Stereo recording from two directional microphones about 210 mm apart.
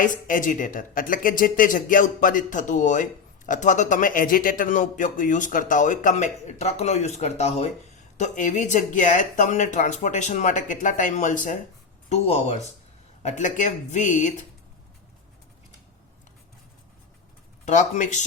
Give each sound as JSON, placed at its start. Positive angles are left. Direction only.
{"t": 0.0, "sound": "speech", "side_deg": 40}
{"t": 17.7, "sound": "speech", "side_deg": 35}